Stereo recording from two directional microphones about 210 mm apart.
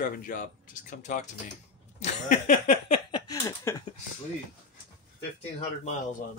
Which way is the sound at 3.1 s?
20° left (ahead or behind).